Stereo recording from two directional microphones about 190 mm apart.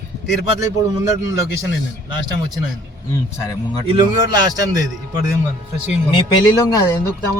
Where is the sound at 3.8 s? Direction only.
25° right (ahead or behind).